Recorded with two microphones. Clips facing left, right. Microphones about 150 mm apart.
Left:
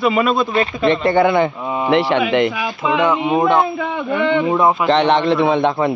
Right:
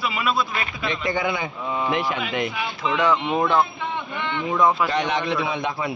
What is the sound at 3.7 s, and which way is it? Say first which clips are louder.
Speech: left 9 dB; 90° left.